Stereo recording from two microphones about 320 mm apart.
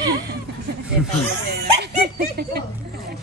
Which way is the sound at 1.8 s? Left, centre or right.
Right.